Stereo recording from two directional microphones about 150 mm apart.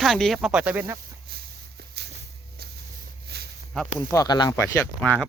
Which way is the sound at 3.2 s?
90° right.